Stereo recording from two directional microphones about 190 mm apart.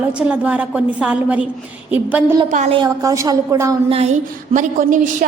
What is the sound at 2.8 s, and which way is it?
Speech, 15° right (ahead or behind).